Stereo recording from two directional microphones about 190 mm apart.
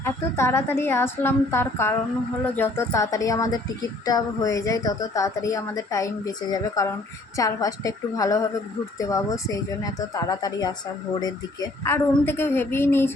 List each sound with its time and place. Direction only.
0.0 s a woman's voice: 15° left (ahead or behind)